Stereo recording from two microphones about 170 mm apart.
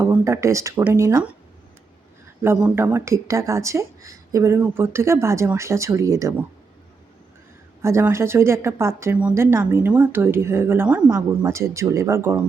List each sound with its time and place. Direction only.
0.0 s a woman's voice: 15° right (ahead or behind)
2.4 s a woman's voice: 10° right (ahead or behind)
7.8 s a woman's voice: 15° right (ahead or behind)